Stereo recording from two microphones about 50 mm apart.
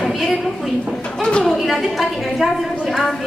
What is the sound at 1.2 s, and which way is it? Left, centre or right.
Speech, centre.